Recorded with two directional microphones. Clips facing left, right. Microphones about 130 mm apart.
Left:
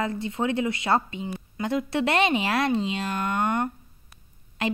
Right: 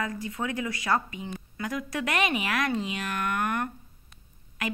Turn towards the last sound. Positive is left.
turn(degrees=30)  # may be behind; listen again after turning